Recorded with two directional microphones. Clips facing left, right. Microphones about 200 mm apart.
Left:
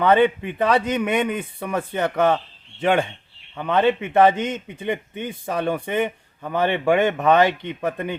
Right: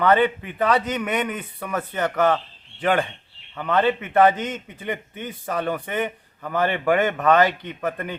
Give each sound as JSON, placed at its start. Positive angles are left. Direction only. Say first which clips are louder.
{"t": 0.0, "sound": "a man's voice", "louder": "left 2 dB", "side_deg": 20}
{"t": 3.5, "sound": "a man's voice", "louder": "left 2 dB", "side_deg": 20}